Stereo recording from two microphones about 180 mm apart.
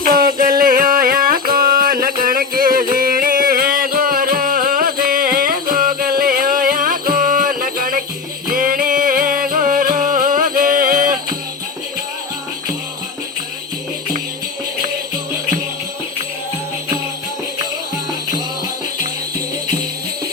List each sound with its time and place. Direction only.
0.0 s music: 50° right (ahead or behind)